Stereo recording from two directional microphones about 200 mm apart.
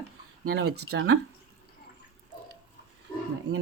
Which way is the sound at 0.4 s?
75° right (ahead or behind).